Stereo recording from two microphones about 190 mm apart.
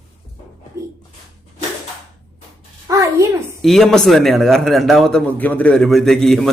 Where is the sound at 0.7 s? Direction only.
15° right (ahead or behind).